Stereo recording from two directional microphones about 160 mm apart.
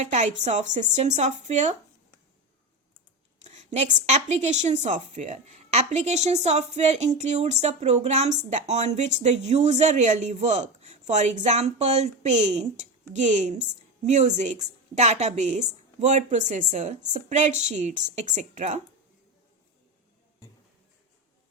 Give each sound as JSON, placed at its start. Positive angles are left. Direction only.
{"t": 0.1, "sound": "a woman's voice", "side_deg": -45}
{"t": 3.4, "sound": "a woman's voice", "side_deg": -45}